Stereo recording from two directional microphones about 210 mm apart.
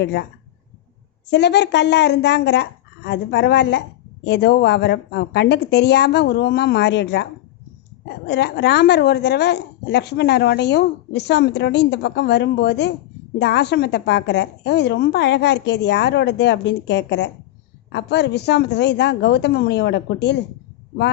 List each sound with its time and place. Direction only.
0.0 s a woman's voice: 55° left (ahead or behind)
1.3 s a woman's voice: 55° left (ahead or behind)
8.3 s a woman's voice: 55° left (ahead or behind)